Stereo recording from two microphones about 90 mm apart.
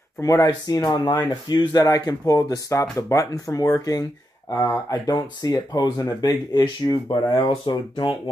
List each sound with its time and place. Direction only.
0.2 s speech: 40° left (ahead or behind)
1.8 s speech: 40° left (ahead or behind)
7.3 s speech: 70° left (ahead or behind)